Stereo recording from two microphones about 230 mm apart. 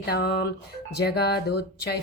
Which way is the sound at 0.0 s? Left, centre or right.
Left.